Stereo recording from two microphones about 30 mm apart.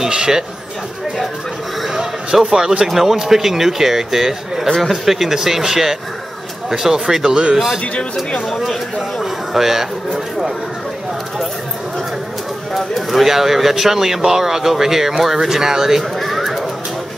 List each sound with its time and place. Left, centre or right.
0.0 s speech: right
2.0 s a sound: centre
2.9 s speech: centre
8.9 s speech: centre
12.7 s speech: centre
16.0 s bird: centre